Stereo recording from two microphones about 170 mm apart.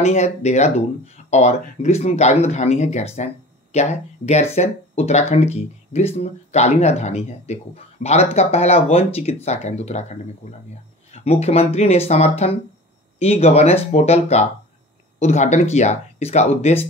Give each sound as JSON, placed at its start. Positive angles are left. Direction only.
{"t": 0.0, "sound": "speech", "side_deg": 40}
{"t": 11.2, "sound": "speech", "side_deg": 35}